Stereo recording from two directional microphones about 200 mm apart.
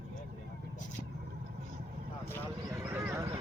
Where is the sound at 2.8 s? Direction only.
10° right (ahead or behind).